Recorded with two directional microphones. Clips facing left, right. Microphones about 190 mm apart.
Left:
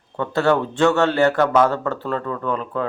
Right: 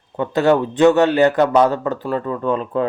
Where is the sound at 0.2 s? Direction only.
15° right (ahead or behind).